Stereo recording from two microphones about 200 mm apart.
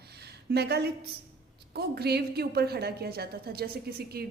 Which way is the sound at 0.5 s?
55° right (ahead or behind).